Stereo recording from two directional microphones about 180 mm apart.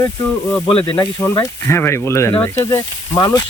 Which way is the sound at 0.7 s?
30° left (ahead or behind).